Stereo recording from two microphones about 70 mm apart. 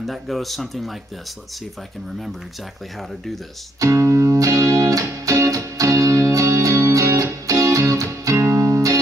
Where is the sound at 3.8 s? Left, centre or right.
Right.